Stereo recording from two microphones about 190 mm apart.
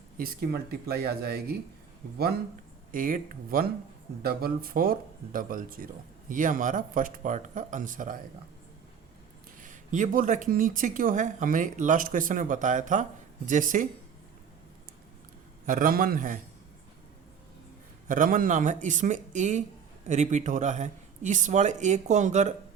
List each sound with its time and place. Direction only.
0.2 s speech: 50° right (ahead or behind)
2.9 s speech: 45° right (ahead or behind)
9.6 s speech: 45° right (ahead or behind)
15.6 s speech: 45° right (ahead or behind)
18.1 s speech: 45° right (ahead or behind)